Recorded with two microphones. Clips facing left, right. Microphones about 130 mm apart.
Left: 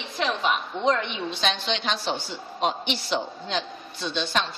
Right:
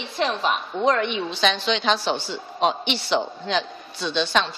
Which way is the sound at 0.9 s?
65° right (ahead or behind).